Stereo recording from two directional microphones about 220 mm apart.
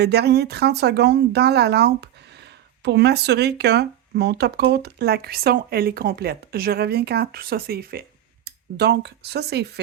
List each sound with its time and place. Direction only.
0.0 s speech: 50° right (ahead or behind)